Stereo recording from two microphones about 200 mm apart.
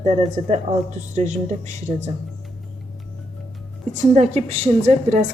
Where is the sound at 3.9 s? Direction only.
35° right (ahead or behind).